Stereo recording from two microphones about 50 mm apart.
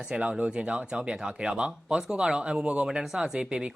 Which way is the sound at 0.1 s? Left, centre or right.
Right.